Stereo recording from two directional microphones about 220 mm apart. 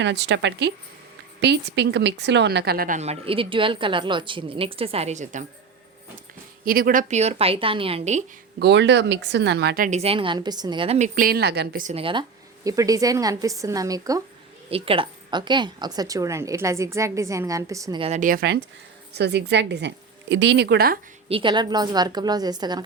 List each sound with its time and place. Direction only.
0.0 s a woman's voice: 55° right (ahead or behind); by 5.5 s 35° right (ahead or behind)
6.7 s a woman's voice: 40° right (ahead or behind)
8.5 s a woman's voice: 50° right (ahead or behind)
21.2 s a woman's voice: 25° right (ahead or behind)